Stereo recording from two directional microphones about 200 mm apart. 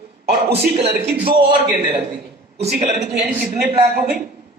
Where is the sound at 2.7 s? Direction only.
45° right (ahead or behind).